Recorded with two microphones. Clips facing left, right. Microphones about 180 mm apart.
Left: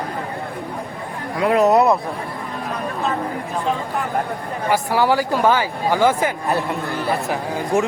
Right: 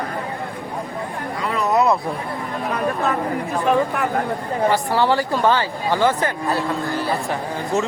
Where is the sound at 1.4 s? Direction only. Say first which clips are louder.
Left 9 dB; 55° left (ahead or behind).